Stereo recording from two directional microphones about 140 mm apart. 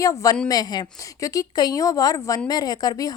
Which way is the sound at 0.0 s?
25° left (ahead or behind).